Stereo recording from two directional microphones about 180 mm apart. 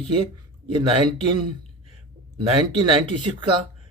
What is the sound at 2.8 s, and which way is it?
Speech, 25° right (ahead or behind).